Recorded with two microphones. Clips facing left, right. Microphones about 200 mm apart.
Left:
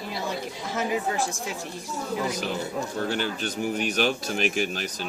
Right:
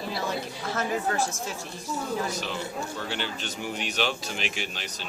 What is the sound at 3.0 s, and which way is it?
Speech, 45° left (ahead or behind).